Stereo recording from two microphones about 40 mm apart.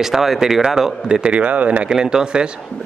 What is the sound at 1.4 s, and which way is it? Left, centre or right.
Speech, right.